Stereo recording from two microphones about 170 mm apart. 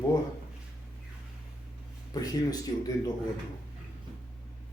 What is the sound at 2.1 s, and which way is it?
Speech, 20° left (ahead or behind).